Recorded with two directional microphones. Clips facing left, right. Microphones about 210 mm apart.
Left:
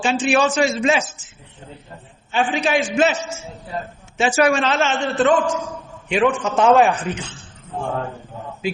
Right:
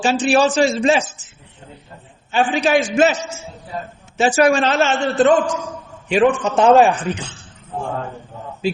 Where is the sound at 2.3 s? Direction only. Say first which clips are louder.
Right 3 dB; 40° right (ahead or behind).